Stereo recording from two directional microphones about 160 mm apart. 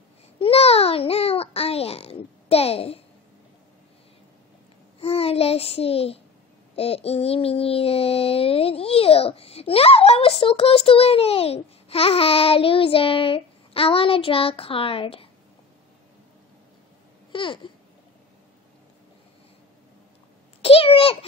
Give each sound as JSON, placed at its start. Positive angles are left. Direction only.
{"t": 0.4, "sound": "a sound", "side_deg": 40}
{"t": 5.0, "sound": "child singing", "side_deg": 40}
{"t": 17.3, "sound": "babbling", "side_deg": 30}
{"t": 20.6, "sound": "a child's voice", "side_deg": 35}